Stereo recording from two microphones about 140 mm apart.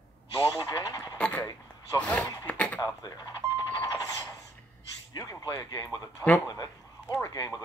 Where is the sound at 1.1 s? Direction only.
10° left (ahead or behind).